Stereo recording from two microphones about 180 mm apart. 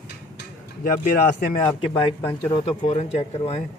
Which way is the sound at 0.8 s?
50° left (ahead or behind).